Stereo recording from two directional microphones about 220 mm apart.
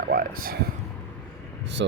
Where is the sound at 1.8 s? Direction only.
55° right (ahead or behind).